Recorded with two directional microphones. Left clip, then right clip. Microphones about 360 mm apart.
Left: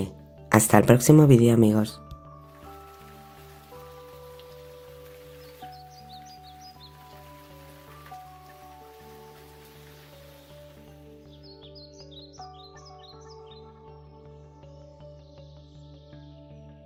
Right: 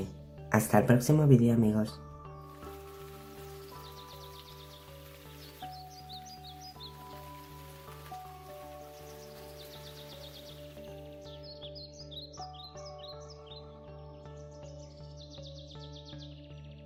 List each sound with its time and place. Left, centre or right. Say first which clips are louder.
0.5 s speech: left 8 dB; left